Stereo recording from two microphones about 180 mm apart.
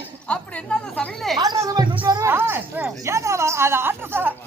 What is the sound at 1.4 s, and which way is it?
Speech, 20° right (ahead or behind).